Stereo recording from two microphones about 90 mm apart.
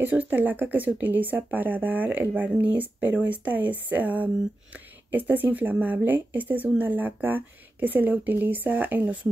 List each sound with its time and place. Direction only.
0.0 s speech: 20° right (ahead or behind)